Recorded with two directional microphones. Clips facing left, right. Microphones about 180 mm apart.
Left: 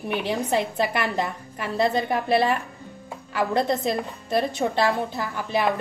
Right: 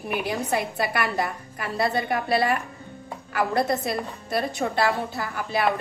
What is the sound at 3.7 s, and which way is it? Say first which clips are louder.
A woman's voice: left 2 dB; 20° left (ahead or behind).